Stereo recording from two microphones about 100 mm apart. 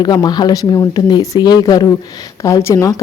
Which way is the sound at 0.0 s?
45° left (ahead or behind).